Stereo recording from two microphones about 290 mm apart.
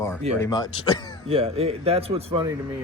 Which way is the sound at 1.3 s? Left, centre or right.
Centre.